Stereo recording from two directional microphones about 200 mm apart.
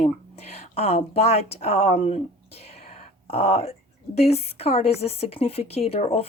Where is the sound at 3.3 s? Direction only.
30° left (ahead or behind).